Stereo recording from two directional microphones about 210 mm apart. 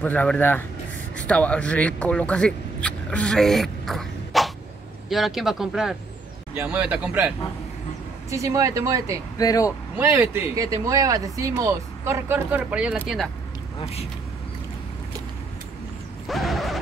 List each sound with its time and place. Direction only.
0.0 s speech: 5° left (ahead or behind); by 9.1 s 15° right (ahead or behind)
9.4 s speech: 15° left (ahead or behind)
9.9 s speech: 10° right (ahead or behind)
13.7 s speech: 30° left (ahead or behind)
16.3 s a sound: centre (ahead or behind)